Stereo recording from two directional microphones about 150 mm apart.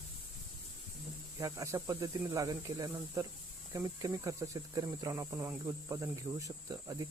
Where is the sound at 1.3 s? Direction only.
20° right (ahead or behind).